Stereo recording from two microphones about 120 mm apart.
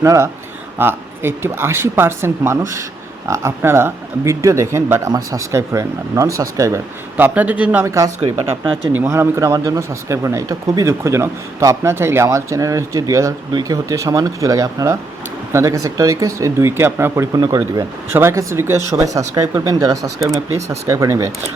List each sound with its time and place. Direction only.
0.0 s speech: 25° right (ahead or behind)
7.9 s speech: 25° right (ahead or behind)
8.2 s speech: 45° right (ahead or behind)
9.0 s speech: 20° right (ahead or behind)
18.1 s speech: 20° right (ahead or behind)